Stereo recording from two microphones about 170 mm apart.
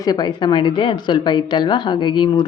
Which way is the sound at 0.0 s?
25° left (ahead or behind).